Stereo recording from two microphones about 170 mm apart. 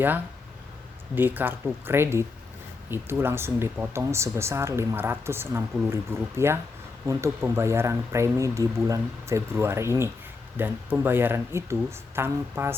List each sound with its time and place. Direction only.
1.1 s speech: 10° right (ahead or behind)